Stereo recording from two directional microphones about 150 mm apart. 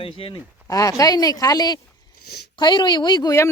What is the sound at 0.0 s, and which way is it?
Speech, 35° left (ahead or behind).